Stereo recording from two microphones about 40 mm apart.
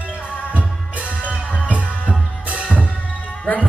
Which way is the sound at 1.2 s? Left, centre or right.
Left.